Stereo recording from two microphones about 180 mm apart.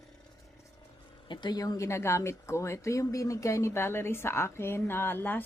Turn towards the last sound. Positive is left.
turn(degrees=10)  # may be behind; listen again after turning